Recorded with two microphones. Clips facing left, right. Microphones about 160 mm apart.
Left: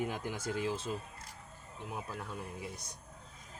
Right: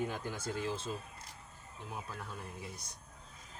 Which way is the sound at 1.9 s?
15° left (ahead or behind).